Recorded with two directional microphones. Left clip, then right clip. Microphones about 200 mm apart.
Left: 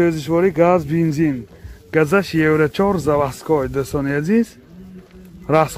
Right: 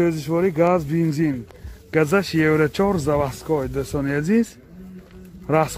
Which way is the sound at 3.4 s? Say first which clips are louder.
Left 5 dB; 20° left (ahead or behind).